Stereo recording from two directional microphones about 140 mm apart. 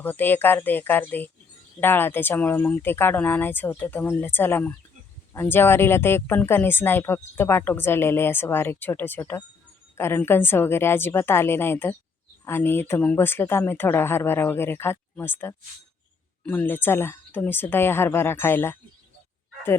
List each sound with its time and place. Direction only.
0.0 s speech: 15° left (ahead or behind)